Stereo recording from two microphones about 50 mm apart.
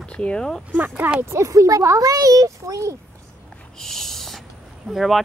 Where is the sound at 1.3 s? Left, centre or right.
Right.